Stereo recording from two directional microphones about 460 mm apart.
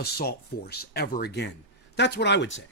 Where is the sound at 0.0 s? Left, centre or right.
Centre.